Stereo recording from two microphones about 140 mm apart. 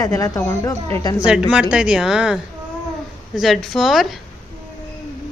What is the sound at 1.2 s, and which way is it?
Speech, 5° right (ahead or behind).